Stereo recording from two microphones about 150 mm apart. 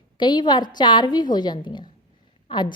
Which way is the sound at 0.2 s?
30° left (ahead or behind).